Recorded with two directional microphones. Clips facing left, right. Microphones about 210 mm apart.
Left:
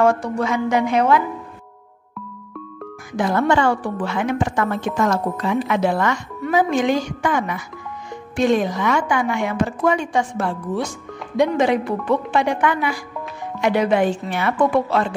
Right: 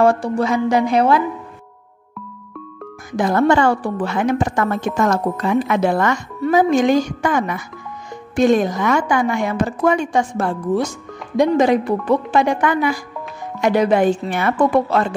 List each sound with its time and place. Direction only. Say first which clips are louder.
0.0 s a woman's voice: right 2 dB; 35° right (ahead or behind)
3.2 s a woman's voice: right 3 dB; 40° right (ahead or behind)